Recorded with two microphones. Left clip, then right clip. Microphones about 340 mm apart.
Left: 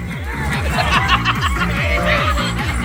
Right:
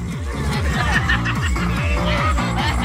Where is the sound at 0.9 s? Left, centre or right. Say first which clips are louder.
Left 6 dB; centre.